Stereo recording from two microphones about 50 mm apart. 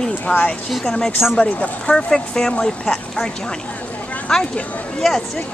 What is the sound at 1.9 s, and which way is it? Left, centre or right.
A woman's voice, centre.